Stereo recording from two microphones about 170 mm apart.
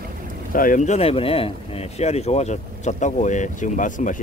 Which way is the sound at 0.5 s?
55° left (ahead or behind).